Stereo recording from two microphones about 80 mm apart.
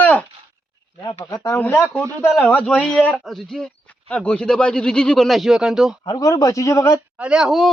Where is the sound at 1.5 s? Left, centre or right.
Left.